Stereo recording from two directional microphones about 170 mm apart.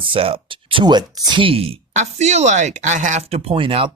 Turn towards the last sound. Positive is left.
turn(degrees=-30)  # may be behind; listen again after turning